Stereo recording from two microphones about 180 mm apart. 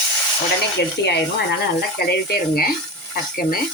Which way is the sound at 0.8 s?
65° left (ahead or behind).